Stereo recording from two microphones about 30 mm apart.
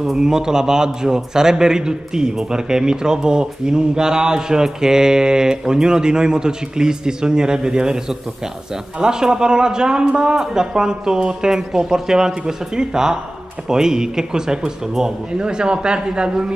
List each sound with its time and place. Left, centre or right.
0.2 s speech: centre
9.0 s speech: right
15.3 s speech: right